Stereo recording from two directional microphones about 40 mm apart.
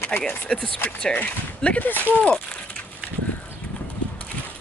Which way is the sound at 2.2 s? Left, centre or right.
Left.